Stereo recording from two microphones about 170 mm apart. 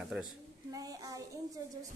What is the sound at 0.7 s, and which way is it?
Speech, 20° right (ahead or behind).